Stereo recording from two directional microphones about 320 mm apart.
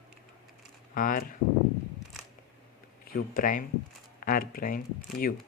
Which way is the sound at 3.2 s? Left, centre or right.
Left.